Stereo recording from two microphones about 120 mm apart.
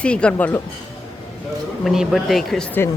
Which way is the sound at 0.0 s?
10° left (ahead or behind).